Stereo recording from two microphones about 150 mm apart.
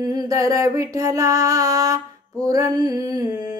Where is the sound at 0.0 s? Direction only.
25° right (ahead or behind).